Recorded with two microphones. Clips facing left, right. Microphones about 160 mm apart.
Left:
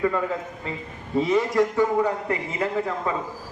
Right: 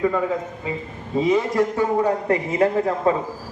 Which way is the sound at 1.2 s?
25° right (ahead or behind).